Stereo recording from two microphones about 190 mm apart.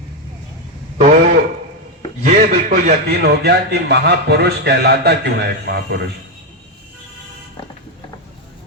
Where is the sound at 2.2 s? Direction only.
45° right (ahead or behind).